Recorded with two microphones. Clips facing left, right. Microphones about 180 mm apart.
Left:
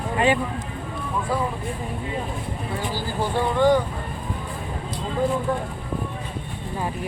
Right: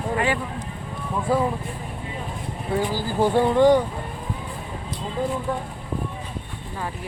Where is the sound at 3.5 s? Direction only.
35° right (ahead or behind).